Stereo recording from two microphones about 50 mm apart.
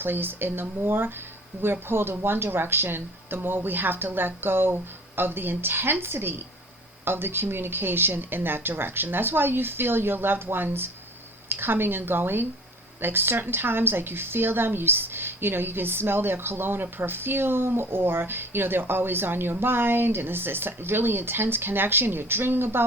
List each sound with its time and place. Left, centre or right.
0.0 s speech: right